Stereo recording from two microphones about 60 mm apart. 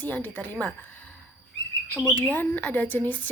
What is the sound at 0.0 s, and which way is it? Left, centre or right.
Speech, left.